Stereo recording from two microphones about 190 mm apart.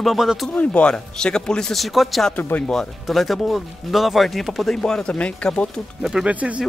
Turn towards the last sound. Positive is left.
turn(degrees=-5)  # may be behind; listen again after turning